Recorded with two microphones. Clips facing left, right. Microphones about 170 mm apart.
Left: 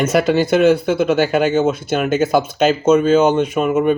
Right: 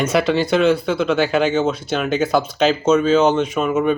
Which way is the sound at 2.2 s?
50° left (ahead or behind).